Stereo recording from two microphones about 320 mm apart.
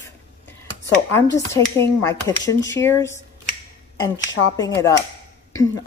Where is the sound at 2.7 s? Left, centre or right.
Centre.